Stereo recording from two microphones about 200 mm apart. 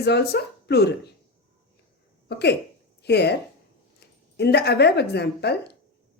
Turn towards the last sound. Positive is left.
turn(degrees=55)  # may be behind; listen again after turning